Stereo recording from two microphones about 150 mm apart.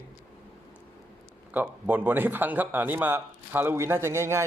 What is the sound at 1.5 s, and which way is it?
A man's voice, 10° right (ahead or behind).